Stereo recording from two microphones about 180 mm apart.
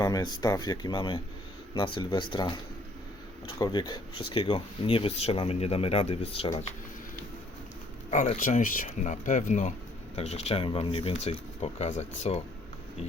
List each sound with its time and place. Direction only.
0.0 s speech: 20° left (ahead or behind)
8.1 s speech: 40° left (ahead or behind)